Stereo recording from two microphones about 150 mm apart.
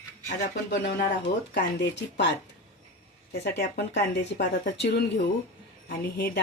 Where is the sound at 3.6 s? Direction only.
90° left.